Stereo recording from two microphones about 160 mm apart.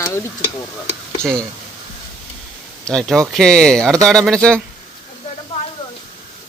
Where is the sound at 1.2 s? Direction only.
5° left (ahead or behind).